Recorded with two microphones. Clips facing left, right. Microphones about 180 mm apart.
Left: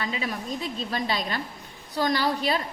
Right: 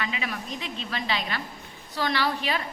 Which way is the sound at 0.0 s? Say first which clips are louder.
Left 2 dB; 35° left (ahead or behind).